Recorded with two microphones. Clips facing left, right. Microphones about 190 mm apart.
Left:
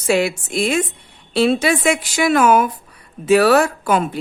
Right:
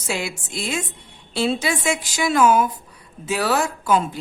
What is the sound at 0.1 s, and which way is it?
A woman's voice, 60° left (ahead or behind).